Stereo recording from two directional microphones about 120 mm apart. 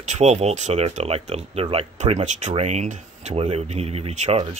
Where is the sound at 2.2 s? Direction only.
75° right (ahead or behind).